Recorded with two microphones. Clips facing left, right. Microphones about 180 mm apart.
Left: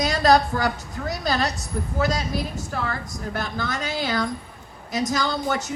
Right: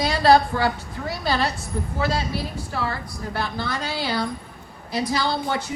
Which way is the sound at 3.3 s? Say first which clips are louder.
Right 1 dB; 45° left (ahead or behind).